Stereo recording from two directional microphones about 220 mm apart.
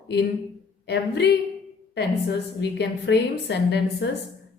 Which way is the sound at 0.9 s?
50° left (ahead or behind).